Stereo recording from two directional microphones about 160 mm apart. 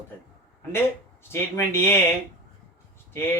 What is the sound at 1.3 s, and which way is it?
Speech, 15° left (ahead or behind).